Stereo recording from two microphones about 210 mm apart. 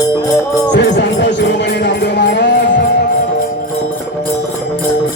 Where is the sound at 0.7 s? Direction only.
55° left (ahead or behind).